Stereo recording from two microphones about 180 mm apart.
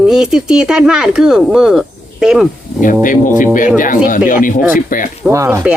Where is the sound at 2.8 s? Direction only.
50° left (ahead or behind).